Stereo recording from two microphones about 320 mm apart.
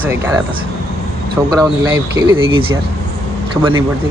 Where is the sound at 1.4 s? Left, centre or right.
Centre.